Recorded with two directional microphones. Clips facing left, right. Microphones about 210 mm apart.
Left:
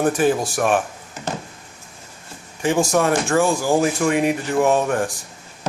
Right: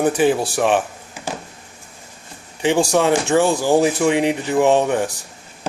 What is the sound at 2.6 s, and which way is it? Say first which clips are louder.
A man's voice: right 2 dB; 15° right (ahead or behind).